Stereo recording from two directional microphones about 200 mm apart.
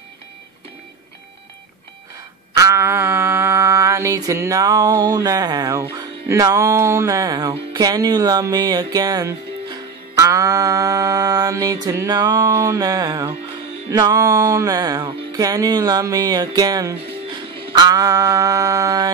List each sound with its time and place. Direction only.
2.5 s mantra: 15° right (ahead or behind)
13.8 s music: 20° right (ahead or behind)